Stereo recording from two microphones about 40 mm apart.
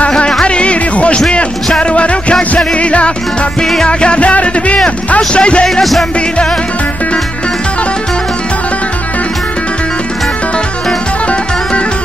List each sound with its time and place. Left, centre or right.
0.3 s music: left
5.1 s speech: left
5.8 s music: centre